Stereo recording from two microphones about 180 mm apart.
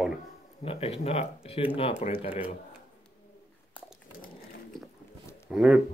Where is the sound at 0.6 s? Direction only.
35° left (ahead or behind).